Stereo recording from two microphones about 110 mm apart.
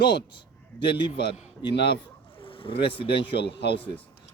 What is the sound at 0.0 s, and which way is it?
A man's voice, 45° left (ahead or behind).